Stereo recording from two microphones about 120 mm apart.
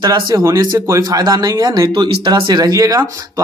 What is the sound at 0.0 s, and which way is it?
Speech, 30° right (ahead or behind).